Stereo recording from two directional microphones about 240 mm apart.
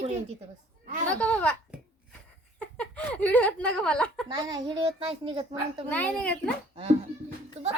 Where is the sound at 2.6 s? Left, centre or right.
Centre.